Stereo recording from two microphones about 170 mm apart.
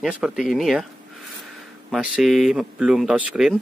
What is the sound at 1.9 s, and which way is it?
Speech, centre (ahead or behind).